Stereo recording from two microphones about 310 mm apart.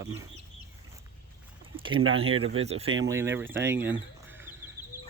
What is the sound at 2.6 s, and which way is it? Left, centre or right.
Speech, centre.